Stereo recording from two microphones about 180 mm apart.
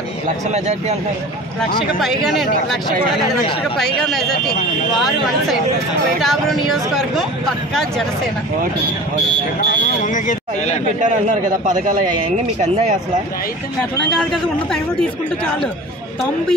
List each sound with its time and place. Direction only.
0.5 s speech: 40° right (ahead or behind)
2.0 s speech: centre (ahead or behind)
6.2 s speech: centre (ahead or behind)
10.0 s speech: 45° left (ahead or behind)
11.0 s a man's voice: 45° right (ahead or behind)